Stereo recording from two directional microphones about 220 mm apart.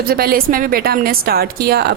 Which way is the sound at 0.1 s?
45° right (ahead or behind).